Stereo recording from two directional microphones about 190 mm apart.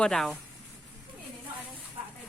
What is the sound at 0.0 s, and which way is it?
Speech, centre (ahead or behind).